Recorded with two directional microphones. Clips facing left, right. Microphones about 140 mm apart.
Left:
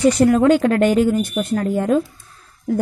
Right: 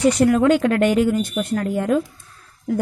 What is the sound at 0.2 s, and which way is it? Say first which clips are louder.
A woman's voice: left 2 dB; 35° left (ahead or behind).